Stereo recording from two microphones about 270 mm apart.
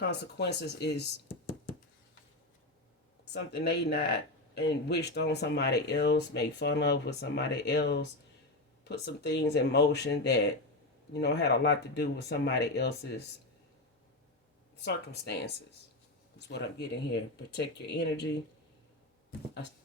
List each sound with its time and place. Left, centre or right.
0.1 s speech: left
3.3 s speech: left
14.8 s speech: left